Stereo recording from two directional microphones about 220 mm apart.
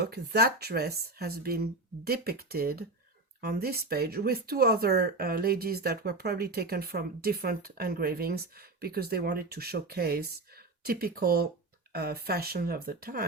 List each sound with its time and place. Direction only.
0.0 s speech: 45° right (ahead or behind)